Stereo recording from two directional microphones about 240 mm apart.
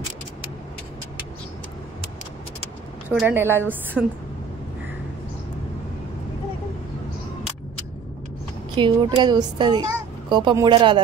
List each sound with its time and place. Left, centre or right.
3.1 s a woman's voice: centre
8.7 s speech: centre